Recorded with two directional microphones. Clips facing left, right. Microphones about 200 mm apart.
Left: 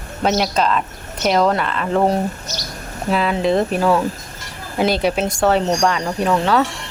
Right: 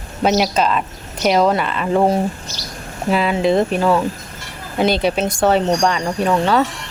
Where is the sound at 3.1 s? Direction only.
5° right (ahead or behind).